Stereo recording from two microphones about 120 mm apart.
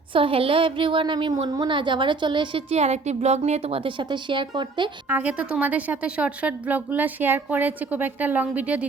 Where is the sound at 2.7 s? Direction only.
65° right (ahead or behind); by 4.9 s 40° right (ahead or behind).